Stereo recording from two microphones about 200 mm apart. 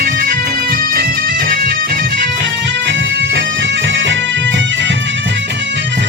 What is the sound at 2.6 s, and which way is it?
Bagpipes, 65° right (ahead or behind).